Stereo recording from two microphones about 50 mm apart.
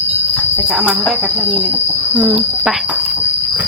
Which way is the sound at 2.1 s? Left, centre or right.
Right.